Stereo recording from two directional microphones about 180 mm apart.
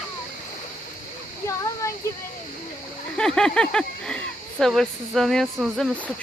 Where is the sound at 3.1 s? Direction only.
5° left (ahead or behind).